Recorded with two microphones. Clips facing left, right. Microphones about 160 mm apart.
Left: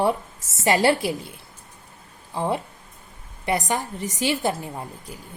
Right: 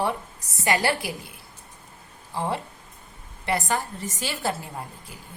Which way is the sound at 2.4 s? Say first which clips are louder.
Left 3 dB; 15° left (ahead or behind).